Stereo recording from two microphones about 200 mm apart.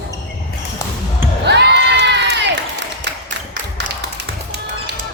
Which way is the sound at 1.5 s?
60° right (ahead or behind).